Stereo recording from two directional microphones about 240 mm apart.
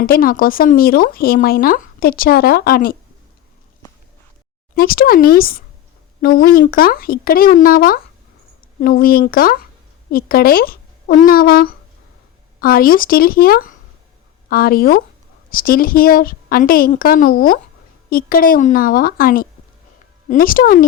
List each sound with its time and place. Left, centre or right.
0.0 s speech: left
4.7 s speech: left